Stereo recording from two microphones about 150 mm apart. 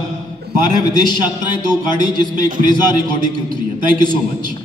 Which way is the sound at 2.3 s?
65° right (ahead or behind).